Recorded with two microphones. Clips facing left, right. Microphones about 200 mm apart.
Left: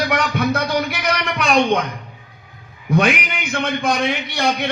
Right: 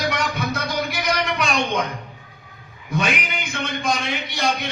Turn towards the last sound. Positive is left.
turn(degrees=60)  # may be behind; listen again after turning